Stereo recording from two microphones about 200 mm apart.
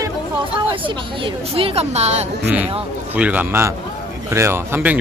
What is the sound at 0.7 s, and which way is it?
A woman's voice, 25° right (ahead or behind).